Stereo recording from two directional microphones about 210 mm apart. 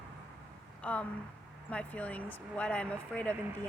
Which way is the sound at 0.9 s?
5° left (ahead or behind).